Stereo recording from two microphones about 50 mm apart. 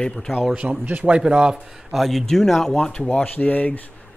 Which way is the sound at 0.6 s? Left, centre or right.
Right.